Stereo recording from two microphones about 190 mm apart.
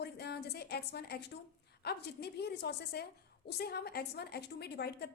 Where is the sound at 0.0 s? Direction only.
60° left (ahead or behind).